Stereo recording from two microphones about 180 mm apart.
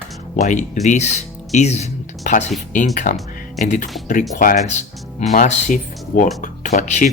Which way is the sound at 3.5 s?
40° left (ahead or behind).